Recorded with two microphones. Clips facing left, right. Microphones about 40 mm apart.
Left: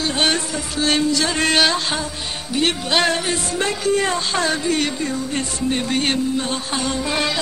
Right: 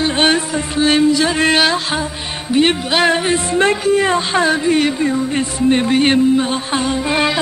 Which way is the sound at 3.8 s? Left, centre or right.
Centre.